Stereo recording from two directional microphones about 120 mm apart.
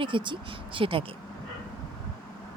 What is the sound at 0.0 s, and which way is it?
Speech, 45° right (ahead or behind).